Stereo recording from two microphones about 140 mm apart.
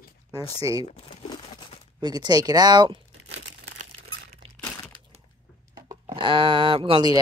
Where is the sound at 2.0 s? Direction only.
30° right (ahead or behind).